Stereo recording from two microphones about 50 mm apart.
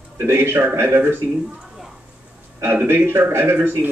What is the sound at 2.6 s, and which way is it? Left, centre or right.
Speech, right.